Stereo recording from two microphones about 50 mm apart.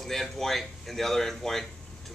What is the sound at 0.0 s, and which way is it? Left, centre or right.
A man's voice, centre.